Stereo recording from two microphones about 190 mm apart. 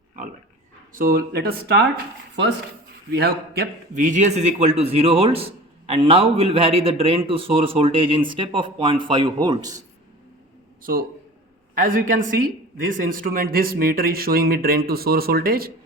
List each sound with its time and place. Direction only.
0.9 s speech: 50° right (ahead or behind)
3.1 s a man's voice: 55° right (ahead or behind); by 9.7 s 20° right (ahead or behind)
10.9 s speech: 50° right (ahead or behind)